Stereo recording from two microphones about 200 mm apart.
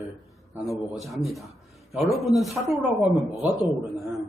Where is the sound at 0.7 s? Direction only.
15° left (ahead or behind).